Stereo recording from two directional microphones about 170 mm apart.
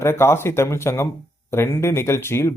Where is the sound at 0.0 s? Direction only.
15° left (ahead or behind).